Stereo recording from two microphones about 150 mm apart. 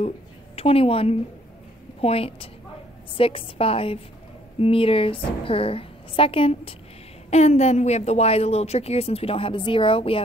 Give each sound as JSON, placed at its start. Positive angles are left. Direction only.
{"t": 0.6, "sound": "a woman's voice", "side_deg": 40}
{"t": 7.2, "sound": "speech", "side_deg": 50}